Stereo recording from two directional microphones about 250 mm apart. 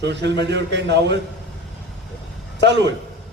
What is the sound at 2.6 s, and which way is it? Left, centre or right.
Speech, right.